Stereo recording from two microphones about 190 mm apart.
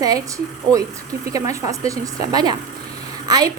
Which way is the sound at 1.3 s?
15° right (ahead or behind).